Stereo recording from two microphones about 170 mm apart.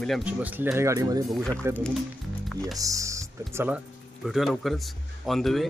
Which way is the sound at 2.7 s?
20° right (ahead or behind).